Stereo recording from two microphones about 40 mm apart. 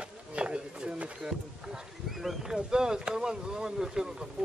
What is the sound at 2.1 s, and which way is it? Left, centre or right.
Speech, centre.